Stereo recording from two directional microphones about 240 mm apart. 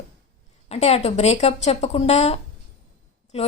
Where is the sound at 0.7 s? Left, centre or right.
Left.